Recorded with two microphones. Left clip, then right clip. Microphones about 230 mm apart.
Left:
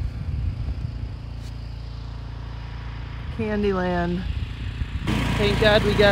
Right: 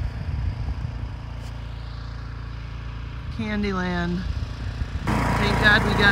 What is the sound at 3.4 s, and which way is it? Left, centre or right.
Speech, centre.